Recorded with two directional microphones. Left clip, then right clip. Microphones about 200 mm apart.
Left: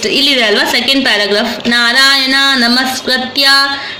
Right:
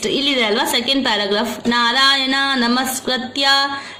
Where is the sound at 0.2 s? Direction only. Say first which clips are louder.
Left 8 dB; 30° right (ahead or behind).